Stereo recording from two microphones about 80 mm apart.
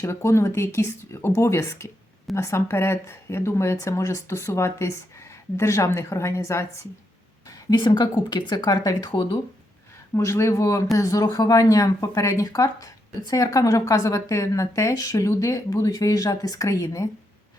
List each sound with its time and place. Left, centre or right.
0.0 s speech: left
7.7 s a woman's voice: left
10.2 s speech: left